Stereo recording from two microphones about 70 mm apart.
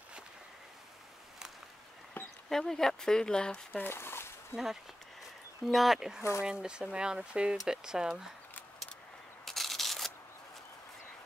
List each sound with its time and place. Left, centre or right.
2.2 s a sound: left
2.5 s speech: centre
3.7 s dog: left
4.5 s speech: left
5.7 s speech: centre
9.4 s rub: centre